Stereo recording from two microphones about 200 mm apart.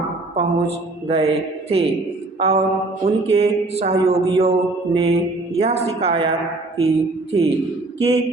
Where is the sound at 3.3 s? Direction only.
30° right (ahead or behind).